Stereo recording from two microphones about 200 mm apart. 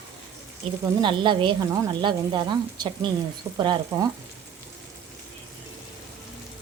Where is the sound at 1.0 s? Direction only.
25° right (ahead or behind).